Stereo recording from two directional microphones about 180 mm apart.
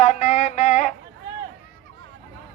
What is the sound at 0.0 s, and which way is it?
Music, 40° left (ahead or behind).